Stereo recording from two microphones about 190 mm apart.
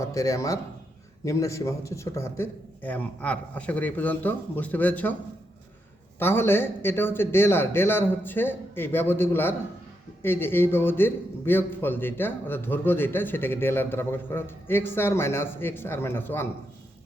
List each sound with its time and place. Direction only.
0.0 s a man's voice: 15° left (ahead or behind)
6.1 s a man's voice: 10° left (ahead or behind)